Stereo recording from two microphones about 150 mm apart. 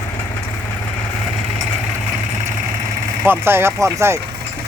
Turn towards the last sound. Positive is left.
turn(degrees=-20)  # may be behind; listen again after turning